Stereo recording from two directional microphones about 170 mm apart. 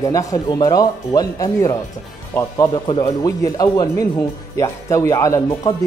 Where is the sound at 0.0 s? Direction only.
20° left (ahead or behind).